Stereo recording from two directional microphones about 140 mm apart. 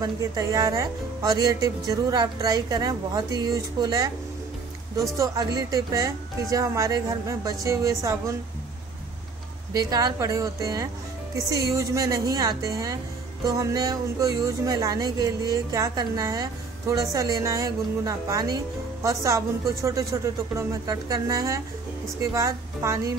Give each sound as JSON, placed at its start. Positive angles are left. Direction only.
{"t": 0.0, "sound": "speech", "side_deg": -25}
{"t": 5.1, "sound": "speech", "side_deg": -25}
{"t": 9.8, "sound": "speech", "side_deg": -25}